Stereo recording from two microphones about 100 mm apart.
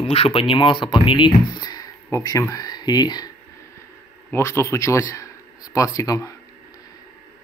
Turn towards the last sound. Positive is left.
turn(degrees=35)  # may be behind; listen again after turning